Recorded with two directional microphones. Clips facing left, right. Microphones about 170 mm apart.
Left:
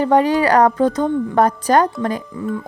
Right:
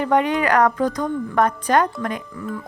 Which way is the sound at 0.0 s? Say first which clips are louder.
Left 4 dB; 35° left (ahead or behind).